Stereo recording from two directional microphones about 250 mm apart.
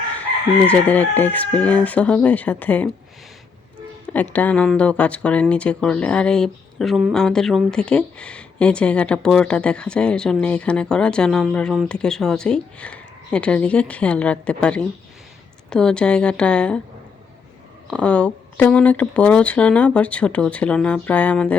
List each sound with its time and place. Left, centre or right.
0.7 s speech: centre
4.0 s speech: centre
17.9 s speech: centre